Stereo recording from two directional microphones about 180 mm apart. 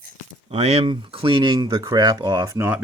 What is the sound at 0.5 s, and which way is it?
Speech, 35° right (ahead or behind).